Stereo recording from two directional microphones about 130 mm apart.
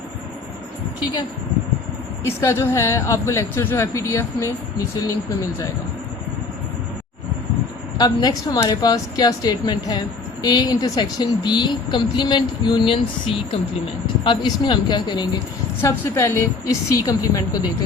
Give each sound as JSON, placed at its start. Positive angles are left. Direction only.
{"t": 2.2, "sound": "speech", "side_deg": 20}
{"t": 7.9, "sound": "speech", "side_deg": 30}
{"t": 15.8, "sound": "speech", "side_deg": 20}